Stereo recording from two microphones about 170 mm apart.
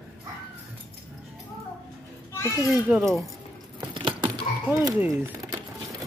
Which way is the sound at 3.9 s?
30° right (ahead or behind).